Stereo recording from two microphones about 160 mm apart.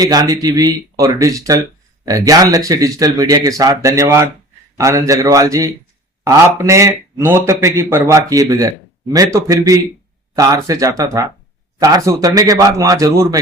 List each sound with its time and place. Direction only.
0.0 s a man's voice: 25° right (ahead or behind)